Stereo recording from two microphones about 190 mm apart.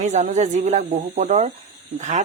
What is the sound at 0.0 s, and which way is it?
Speech, 40° right (ahead or behind).